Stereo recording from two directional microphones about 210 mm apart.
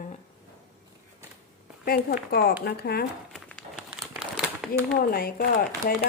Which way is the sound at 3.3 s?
5° left (ahead or behind).